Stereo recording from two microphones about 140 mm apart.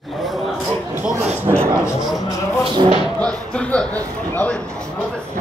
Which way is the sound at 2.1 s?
25° left (ahead or behind).